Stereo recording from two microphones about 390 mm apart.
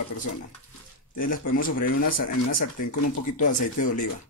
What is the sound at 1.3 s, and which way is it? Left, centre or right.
Speech, left.